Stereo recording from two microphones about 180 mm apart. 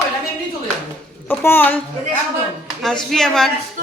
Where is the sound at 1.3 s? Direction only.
10° left (ahead or behind).